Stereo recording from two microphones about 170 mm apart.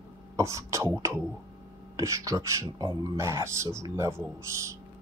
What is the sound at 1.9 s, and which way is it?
Speech, 20° right (ahead or behind).